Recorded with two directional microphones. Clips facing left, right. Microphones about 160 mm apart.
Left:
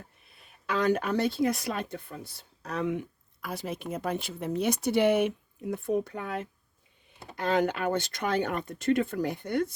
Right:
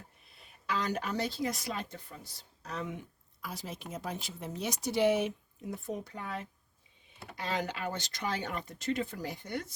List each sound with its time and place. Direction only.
0.7 s speech: 55° left (ahead or behind)